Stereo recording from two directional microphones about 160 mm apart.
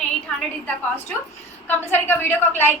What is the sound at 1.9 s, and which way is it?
Speech, 15° left (ahead or behind).